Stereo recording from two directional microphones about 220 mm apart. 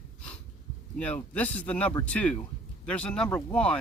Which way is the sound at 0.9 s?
5° left (ahead or behind).